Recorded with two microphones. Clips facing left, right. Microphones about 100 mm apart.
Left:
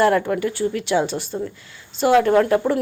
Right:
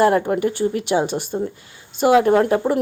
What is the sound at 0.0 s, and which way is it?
Speech, 30° right (ahead or behind).